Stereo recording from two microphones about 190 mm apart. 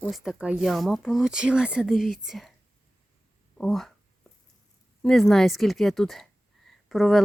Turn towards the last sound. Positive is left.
turn(degrees=0)  # may be behind; listen again after turning